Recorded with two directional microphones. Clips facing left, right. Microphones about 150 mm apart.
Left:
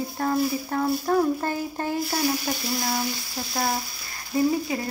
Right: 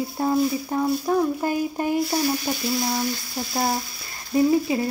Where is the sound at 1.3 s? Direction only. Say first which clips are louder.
Right 4 dB; 15° right (ahead or behind).